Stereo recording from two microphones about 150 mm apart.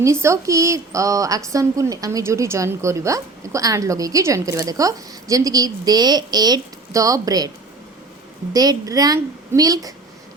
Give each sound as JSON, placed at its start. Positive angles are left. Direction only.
{"t": 0.0, "sound": "a woman's voice", "side_deg": -20}
{"t": 8.5, "sound": "a woman's voice", "side_deg": -25}